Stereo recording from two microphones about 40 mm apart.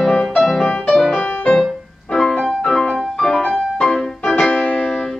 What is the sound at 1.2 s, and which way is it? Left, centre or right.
Music, left.